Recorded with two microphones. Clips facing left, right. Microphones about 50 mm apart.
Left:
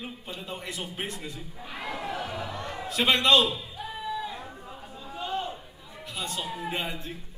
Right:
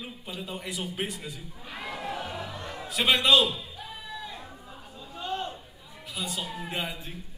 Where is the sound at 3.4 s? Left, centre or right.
Centre.